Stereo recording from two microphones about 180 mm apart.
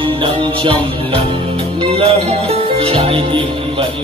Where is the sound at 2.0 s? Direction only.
35° right (ahead or behind).